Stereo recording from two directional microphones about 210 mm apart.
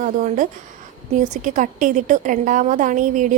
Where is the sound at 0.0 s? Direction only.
40° right (ahead or behind).